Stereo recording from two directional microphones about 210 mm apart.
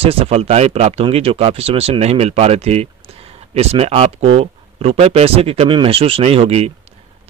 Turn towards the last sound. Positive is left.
turn(degrees=-30)  # may be behind; listen again after turning